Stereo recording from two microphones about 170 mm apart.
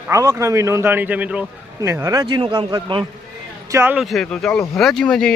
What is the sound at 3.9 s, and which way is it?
Speech, centre (ahead or behind).